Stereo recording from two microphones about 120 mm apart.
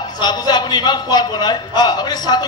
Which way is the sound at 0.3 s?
35° left (ahead or behind).